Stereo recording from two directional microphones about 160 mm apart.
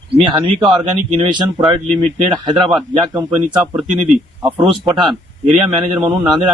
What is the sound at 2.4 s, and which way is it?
Speech, 30° right (ahead or behind).